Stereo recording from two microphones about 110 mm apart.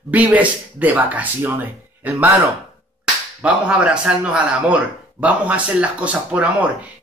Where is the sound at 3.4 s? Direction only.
10° right (ahead or behind).